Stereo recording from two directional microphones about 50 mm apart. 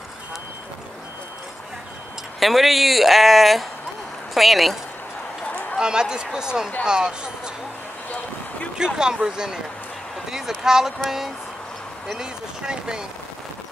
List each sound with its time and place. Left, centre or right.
2.4 s speech: centre
5.5 s a sound: left
5.8 s a man's voice: centre
8.7 s a man's voice: centre
10.6 s a man's voice: centre